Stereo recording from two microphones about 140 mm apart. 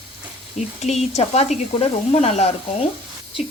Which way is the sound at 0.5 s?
50° left (ahead or behind).